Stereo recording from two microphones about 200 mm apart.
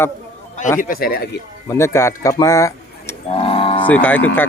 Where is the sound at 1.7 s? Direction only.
15° left (ahead or behind).